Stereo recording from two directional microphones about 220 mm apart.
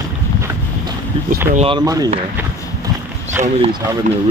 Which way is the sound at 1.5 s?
20° right (ahead or behind).